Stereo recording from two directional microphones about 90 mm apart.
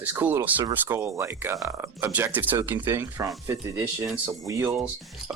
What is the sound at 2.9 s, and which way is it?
Speech, 35° right (ahead or behind).